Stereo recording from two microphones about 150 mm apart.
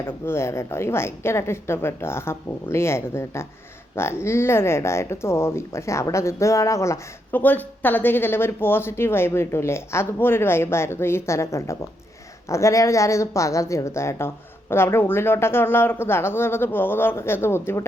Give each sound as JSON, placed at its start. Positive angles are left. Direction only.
{"t": 0.0, "sound": "a woman's voice", "side_deg": 15}